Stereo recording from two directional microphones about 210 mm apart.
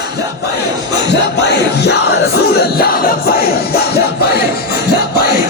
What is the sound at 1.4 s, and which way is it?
Music, 55° left (ahead or behind).